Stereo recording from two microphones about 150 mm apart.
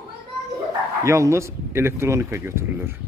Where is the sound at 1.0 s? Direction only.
20° right (ahead or behind).